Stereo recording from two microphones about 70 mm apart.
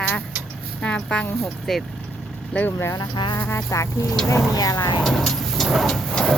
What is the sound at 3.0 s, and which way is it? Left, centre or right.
Speech, left.